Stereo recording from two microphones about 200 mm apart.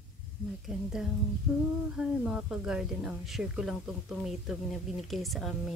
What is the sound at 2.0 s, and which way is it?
Speech, 5° right (ahead or behind).